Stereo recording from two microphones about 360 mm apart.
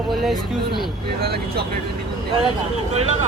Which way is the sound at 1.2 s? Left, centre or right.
Right.